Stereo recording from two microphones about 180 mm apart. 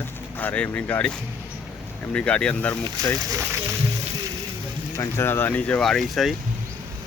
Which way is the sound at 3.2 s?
20° right (ahead or behind).